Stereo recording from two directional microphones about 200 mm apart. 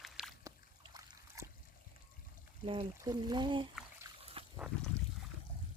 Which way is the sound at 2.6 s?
25° right (ahead or behind).